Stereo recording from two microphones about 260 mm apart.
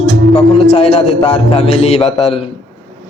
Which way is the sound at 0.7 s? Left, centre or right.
Left.